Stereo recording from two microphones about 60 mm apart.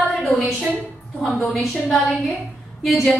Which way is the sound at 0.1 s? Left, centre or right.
Centre.